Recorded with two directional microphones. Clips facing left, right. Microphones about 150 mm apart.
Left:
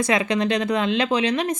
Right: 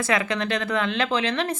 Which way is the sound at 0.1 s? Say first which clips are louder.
Left 2 dB; 20° left (ahead or behind).